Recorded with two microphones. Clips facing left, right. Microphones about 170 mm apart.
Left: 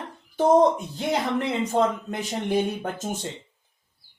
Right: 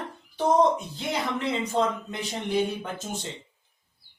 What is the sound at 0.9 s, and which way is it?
A man's voice, 50° left (ahead or behind).